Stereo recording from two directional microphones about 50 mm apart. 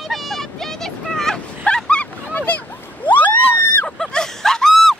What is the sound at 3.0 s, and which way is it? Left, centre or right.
Vehicle, left.